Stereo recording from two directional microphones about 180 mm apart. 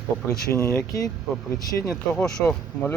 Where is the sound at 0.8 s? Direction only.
20° left (ahead or behind).